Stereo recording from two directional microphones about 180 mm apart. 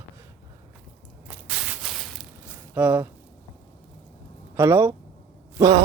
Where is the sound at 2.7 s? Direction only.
10° right (ahead or behind).